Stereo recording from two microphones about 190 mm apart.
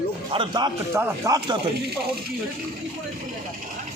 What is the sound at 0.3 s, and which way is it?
A man's voice, 25° right (ahead or behind).